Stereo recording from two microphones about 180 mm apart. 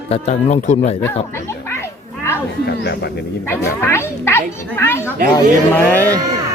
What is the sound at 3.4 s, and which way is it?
Speech, 15° left (ahead or behind).